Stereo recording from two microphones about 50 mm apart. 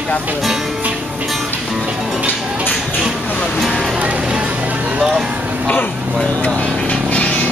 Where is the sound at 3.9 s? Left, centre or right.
Right.